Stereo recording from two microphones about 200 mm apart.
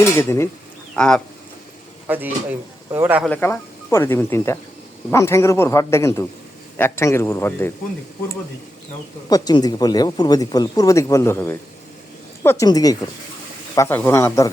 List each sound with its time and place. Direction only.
0.0 s speech: 15° left (ahead or behind)
2.0 s speech: 10° right (ahead or behind)
3.2 s speech: 5° left (ahead or behind)
9.3 s speech: 20° left (ahead or behind)